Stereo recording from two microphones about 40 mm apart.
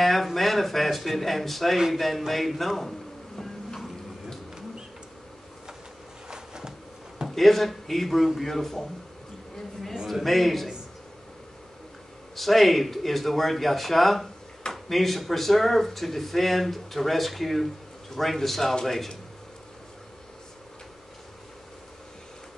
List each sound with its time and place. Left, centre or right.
0.0 s a sound: centre
2.0 s speech: centre
6.2 s a sound: centre
7.2 s speech: centre
10.0 s speech: centre
12.4 s speech: centre